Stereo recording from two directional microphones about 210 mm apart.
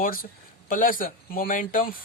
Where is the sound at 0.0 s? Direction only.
40° left (ahead or behind).